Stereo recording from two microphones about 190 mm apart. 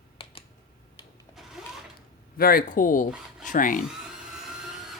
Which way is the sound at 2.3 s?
50° left (ahead or behind).